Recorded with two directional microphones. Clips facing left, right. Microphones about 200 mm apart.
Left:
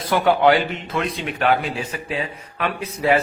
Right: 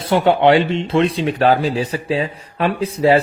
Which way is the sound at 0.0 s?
25° right (ahead or behind).